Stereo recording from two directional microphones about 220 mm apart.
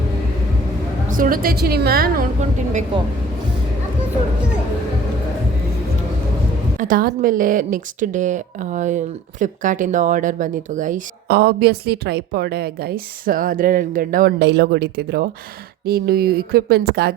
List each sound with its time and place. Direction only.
1.0 s a woman's voice: 35° right (ahead or behind)
6.7 s a woman's voice: 40° right (ahead or behind)